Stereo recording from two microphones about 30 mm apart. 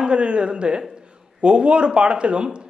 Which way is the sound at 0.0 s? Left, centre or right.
Right.